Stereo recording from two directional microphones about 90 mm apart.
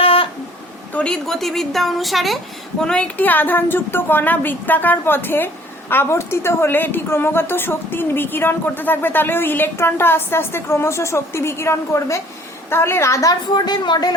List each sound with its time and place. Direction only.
0.0 s a sound: 90° left
0.9 s a woman's voice: 10° left (ahead or behind)
2.8 s a woman's voice: 10° left (ahead or behind); by 13.3 s 35° left (ahead or behind)
13.5 s a woman's voice: 55° left (ahead or behind)